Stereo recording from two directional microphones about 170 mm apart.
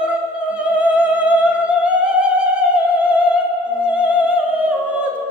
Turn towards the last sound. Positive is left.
turn(degrees=-10)  # may be behind; listen again after turning